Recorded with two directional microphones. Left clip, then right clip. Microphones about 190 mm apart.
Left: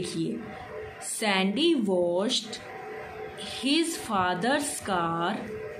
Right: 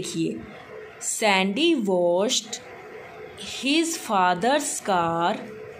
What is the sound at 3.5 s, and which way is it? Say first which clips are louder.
Speech: right 3 dB; 30° right (ahead or behind).